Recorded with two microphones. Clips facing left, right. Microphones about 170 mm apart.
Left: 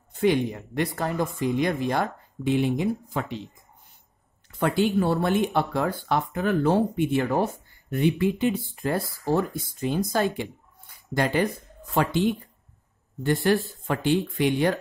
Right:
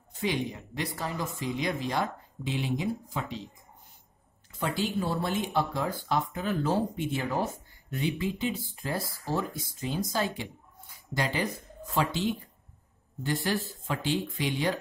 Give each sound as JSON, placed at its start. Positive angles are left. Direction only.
{"t": 0.1, "sound": "speech", "side_deg": 55}
{"t": 4.5, "sound": "speech", "side_deg": 60}